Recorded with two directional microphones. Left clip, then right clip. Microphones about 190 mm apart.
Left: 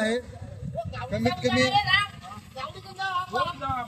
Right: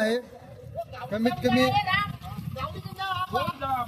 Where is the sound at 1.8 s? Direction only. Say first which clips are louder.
Left 3 dB; 60° left (ahead or behind).